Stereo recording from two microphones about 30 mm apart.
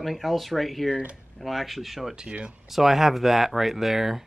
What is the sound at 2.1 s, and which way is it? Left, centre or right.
Speech, right.